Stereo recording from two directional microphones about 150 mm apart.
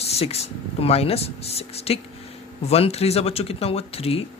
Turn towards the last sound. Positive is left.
turn(degrees=40)  # may be behind; listen again after turning